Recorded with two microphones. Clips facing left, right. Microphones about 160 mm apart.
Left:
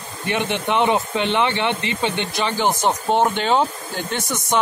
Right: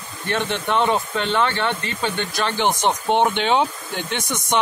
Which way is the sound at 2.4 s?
10° left (ahead or behind).